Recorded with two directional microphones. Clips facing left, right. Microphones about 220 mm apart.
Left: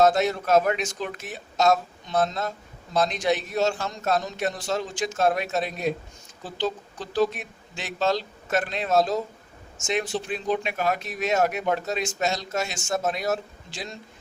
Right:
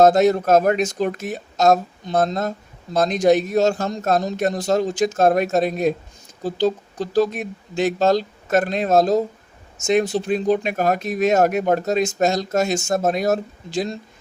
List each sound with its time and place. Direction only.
0.0 s speech: 45° right (ahead or behind)